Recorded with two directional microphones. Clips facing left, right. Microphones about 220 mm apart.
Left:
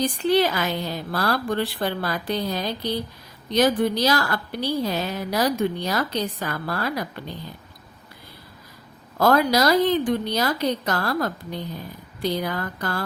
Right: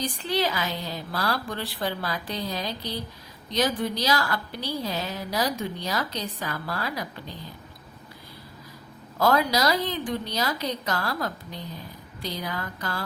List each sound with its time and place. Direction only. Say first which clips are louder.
0.0 s a woman's voice: left 7 dB; 55° left (ahead or behind)
9.1 s a woman's voice: left 4 dB; 55° left (ahead or behind)